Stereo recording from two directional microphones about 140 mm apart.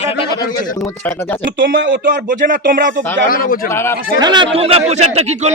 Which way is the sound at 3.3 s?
90° left.